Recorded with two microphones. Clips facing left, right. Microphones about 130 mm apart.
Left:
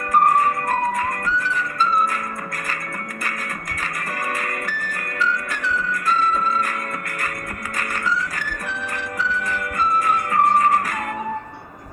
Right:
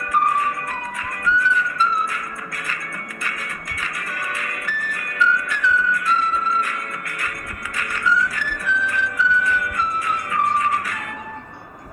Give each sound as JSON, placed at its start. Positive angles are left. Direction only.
{"t": 0.1, "sound": "music", "side_deg": 40}
{"t": 4.4, "sound": "music", "side_deg": 40}
{"t": 7.8, "sound": "music", "side_deg": 40}